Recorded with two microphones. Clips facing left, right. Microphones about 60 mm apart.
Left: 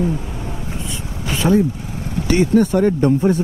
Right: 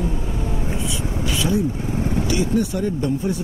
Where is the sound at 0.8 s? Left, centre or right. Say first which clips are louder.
Right 3 dB; left.